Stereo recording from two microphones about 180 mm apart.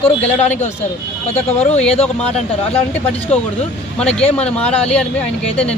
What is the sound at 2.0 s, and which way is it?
Speech, 35° left (ahead or behind).